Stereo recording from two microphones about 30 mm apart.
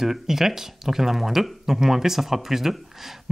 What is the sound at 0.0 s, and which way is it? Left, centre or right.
Speech, centre.